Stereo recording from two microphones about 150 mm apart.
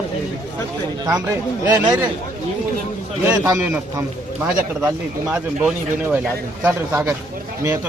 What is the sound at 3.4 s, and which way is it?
Speech, 20° right (ahead or behind).